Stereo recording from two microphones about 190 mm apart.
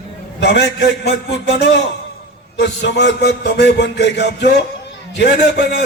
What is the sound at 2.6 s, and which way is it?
A man's voice, 65° left (ahead or behind).